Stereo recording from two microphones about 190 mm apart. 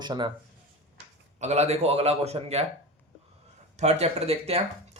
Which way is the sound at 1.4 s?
35° right (ahead or behind).